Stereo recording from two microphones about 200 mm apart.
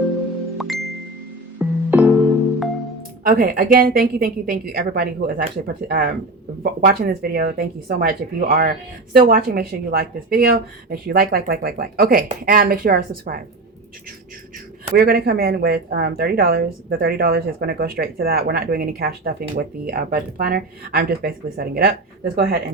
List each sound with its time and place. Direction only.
1.5 s music: 5° right (ahead or behind)
3.2 s speech: 45° right (ahead or behind)
14.9 s speech: 50° right (ahead or behind)